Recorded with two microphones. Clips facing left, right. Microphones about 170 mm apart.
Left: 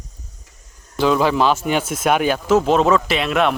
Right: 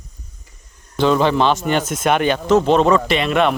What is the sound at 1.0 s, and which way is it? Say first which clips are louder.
Speech: right 1 dB; 5° left (ahead or behind).